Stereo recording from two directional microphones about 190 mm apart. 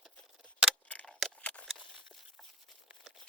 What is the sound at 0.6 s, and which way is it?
Scissors, 5° left (ahead or behind).